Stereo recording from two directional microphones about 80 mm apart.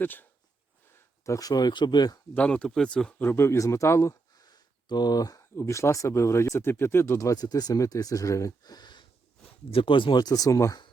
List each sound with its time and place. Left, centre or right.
0.0 s speech: left
1.2 s speech: left
2.3 s speech: centre
3.2 s speech: left
4.4 s a sound: left
5.5 s speech: left
9.8 s speech: left